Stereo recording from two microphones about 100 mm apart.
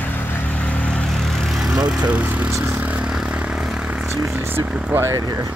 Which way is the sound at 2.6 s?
15° right (ahead or behind).